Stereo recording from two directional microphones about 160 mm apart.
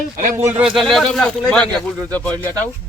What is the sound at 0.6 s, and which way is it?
Speech, centre (ahead or behind).